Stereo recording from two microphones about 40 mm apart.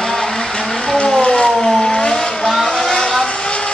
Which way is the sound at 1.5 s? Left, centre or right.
Centre.